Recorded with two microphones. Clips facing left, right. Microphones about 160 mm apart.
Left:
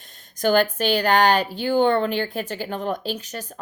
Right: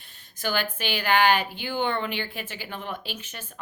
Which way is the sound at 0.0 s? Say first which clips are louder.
Left 9 dB; 40° left (ahead or behind).